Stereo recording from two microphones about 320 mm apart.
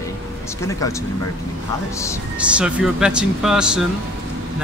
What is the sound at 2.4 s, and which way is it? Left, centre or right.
Speech, centre.